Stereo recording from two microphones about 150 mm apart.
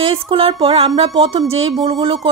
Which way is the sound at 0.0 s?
40° right (ahead or behind).